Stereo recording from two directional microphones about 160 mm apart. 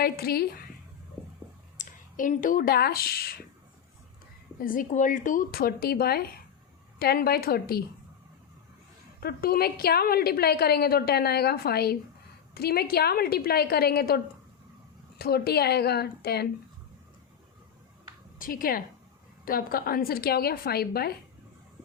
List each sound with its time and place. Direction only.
0.0 s a woman's voice: 70° left (ahead or behind)
1.8 s speech: 55° left (ahead or behind); by 3.3 s 70° left (ahead or behind)
4.6 s a woman's voice: 60° left (ahead or behind)
9.2 s a woman's voice: 70° left (ahead or behind)
15.2 s a woman's voice: 80° left
18.3 s a woman's voice: 60° left (ahead or behind)